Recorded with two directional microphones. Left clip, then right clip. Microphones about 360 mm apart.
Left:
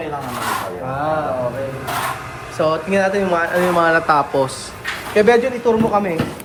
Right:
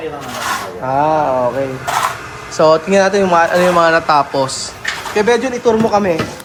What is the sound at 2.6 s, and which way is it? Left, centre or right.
Speech, centre.